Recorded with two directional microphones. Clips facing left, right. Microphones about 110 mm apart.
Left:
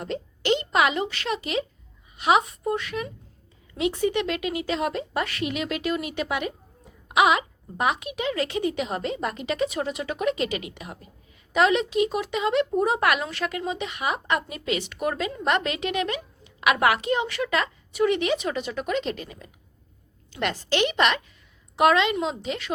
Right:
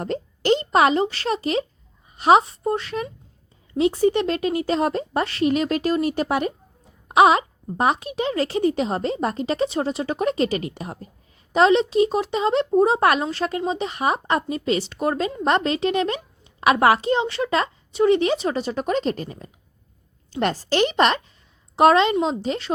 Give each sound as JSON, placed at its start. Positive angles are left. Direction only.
{"t": 0.0, "sound": "speech", "side_deg": -40}